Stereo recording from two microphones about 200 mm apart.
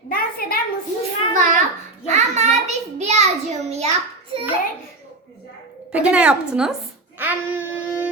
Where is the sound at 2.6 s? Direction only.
35° right (ahead or behind).